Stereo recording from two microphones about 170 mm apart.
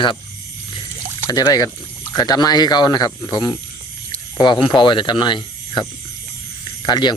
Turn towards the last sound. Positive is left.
turn(degrees=25)  # may be behind; listen again after turning